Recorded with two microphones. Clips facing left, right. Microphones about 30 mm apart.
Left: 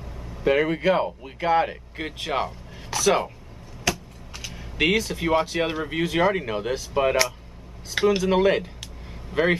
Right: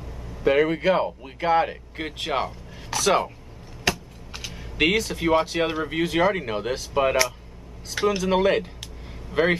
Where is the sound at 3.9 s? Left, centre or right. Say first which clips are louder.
Right 1 dB; right.